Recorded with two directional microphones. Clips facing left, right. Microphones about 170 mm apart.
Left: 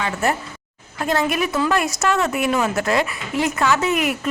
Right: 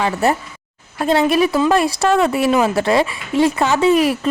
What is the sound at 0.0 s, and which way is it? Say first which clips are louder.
A woman's voice: right 5 dB; 30° right (ahead or behind).